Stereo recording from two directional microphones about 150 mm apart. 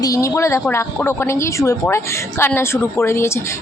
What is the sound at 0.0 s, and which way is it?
Speech, 20° left (ahead or behind).